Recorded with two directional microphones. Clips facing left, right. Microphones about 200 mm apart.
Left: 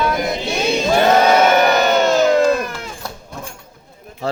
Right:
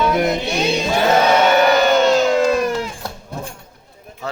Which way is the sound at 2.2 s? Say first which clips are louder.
Left 1 dB; 45° left (ahead or behind).